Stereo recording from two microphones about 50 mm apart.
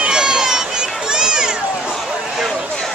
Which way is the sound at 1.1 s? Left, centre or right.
Centre.